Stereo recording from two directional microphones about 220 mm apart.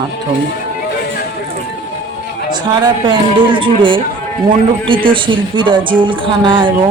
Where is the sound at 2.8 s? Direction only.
20° right (ahead or behind).